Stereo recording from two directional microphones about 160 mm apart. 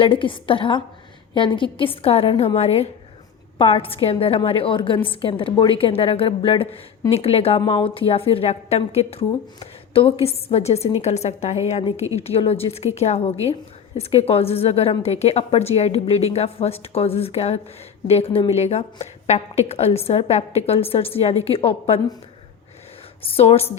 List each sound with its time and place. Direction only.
0.0 s a woman's voice: 30° left (ahead or behind)
23.2 s a woman's voice: 40° left (ahead or behind)